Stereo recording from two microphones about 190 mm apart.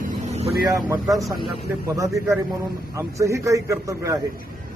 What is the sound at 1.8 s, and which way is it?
A man's voice, 15° right (ahead or behind).